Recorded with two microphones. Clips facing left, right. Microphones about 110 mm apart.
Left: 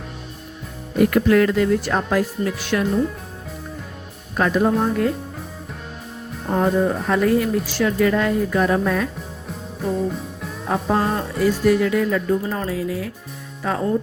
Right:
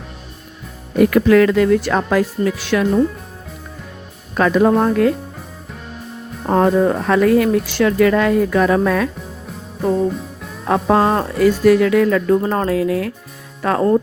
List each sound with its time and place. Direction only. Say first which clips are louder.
0.9 s speech: right 4 dB; 90° right
4.4 s speech: right 5 dB; 90° right
6.5 s speech: right 5 dB; 90° right
10.1 s music: right 3 dB; centre (ahead or behind)
10.7 s speech: right 6 dB; 80° right
12.4 s speech: right 7 dB; 55° right (ahead or behind)